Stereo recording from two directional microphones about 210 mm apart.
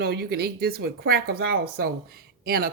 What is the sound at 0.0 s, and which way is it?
Speech, 50° right (ahead or behind).